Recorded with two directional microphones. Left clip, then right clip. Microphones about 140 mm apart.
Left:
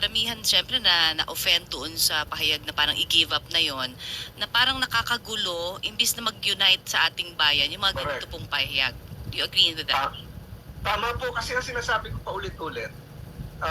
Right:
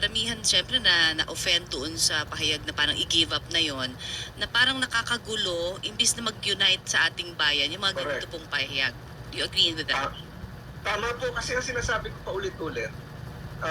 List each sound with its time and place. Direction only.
0.0 s speech: 45° left (ahead or behind)